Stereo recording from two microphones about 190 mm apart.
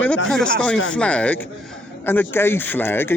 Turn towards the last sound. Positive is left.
turn(degrees=10)  # may be behind; listen again after turning